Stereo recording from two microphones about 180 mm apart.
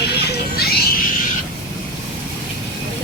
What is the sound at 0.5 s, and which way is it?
Music, 60° left (ahead or behind).